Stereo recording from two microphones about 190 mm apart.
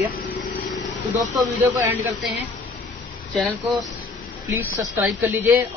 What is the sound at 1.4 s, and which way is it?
Speech, 15° right (ahead or behind).